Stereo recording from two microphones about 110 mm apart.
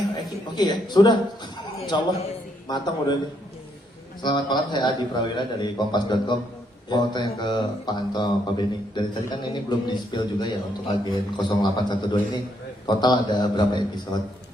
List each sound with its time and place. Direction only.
0.5 s a man's voice: 40° left (ahead or behind)
4.2 s a man's voice: 45° left (ahead or behind)